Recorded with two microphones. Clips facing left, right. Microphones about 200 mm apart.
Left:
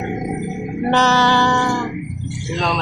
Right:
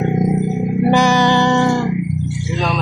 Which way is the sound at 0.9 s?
10° right (ahead or behind).